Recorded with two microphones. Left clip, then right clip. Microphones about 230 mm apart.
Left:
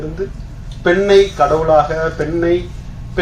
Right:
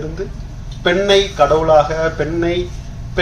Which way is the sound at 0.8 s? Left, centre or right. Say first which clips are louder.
Left 2 dB; right.